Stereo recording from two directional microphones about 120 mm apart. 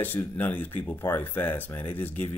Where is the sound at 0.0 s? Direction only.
15° left (ahead or behind).